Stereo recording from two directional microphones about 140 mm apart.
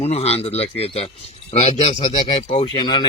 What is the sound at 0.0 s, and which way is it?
A man's voice, 50° left (ahead or behind).